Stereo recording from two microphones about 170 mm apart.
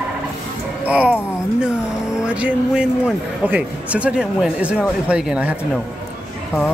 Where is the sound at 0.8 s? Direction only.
5° right (ahead or behind).